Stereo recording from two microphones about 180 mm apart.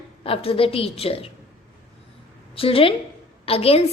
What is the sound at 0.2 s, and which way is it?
A woman's voice, 30° left (ahead or behind).